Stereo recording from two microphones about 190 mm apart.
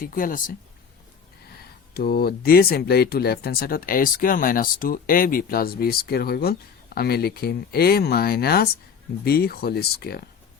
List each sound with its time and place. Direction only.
0.0 s speech: 45° left (ahead or behind)
1.9 s speech: 55° left (ahead or behind)